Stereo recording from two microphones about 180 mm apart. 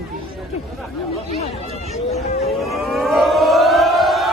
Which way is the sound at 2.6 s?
Centre (ahead or behind).